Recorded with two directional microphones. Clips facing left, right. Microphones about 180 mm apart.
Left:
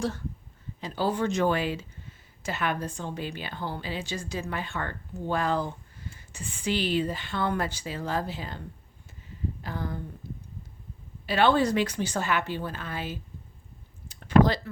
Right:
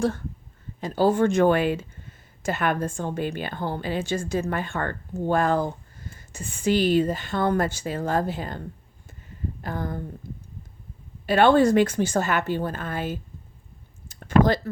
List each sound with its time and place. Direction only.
0.8 s speech: 45° right (ahead or behind)
11.3 s speech: 50° right (ahead or behind)